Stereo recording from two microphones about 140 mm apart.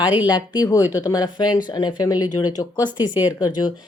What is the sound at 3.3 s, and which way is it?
Speech, 30° left (ahead or behind).